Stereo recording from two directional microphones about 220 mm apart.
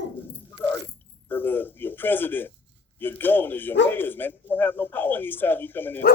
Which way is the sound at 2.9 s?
10° left (ahead or behind).